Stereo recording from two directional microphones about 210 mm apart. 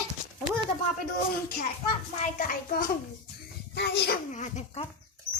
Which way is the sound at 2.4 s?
40° left (ahead or behind).